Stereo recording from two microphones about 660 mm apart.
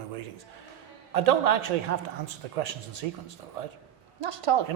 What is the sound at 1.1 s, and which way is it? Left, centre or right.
A man's voice, right.